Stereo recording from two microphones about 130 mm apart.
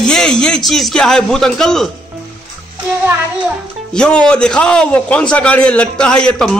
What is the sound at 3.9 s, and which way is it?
A man's voice, 5° left (ahead or behind).